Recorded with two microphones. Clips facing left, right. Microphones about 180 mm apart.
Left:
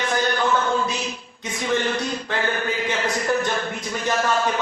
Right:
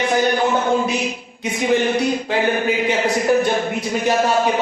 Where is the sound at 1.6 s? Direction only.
15° right (ahead or behind).